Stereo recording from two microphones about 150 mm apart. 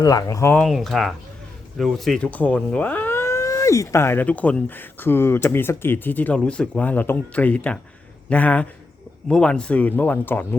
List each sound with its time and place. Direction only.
0.0 s speech: 25° left (ahead or behind)
0.6 s speech: centre (ahead or behind)